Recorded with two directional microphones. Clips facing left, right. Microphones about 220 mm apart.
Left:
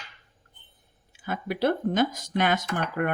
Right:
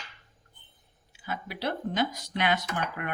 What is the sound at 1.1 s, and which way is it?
Speech, 50° left (ahead or behind).